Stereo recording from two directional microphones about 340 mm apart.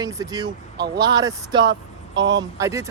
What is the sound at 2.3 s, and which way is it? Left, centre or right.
Speech, centre.